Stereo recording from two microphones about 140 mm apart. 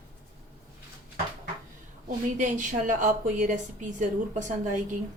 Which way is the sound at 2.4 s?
65° right (ahead or behind).